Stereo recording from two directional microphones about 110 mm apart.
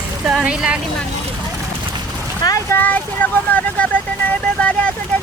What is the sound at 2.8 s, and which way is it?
Speech, 15° left (ahead or behind).